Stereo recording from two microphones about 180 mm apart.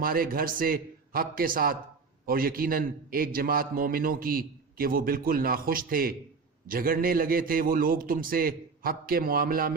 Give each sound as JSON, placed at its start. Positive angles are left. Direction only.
{"t": 0.0, "sound": "a man's voice", "side_deg": -55}